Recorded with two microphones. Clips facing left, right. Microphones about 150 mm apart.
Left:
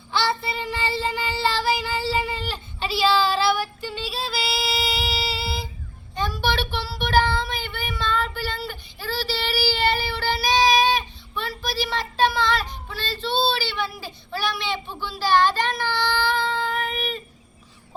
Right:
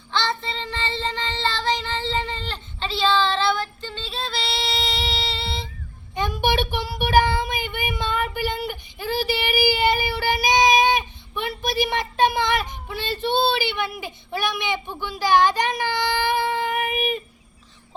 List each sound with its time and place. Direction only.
0.1 s child singing: 10° left (ahead or behind)
6.1 s child singing: 15° right (ahead or behind)